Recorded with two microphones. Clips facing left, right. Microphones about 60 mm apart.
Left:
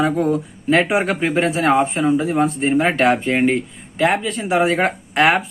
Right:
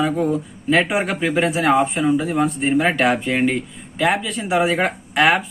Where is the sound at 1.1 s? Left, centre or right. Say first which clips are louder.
Left 2 dB; centre.